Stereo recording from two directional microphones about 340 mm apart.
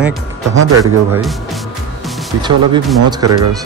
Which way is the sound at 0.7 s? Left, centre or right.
Centre.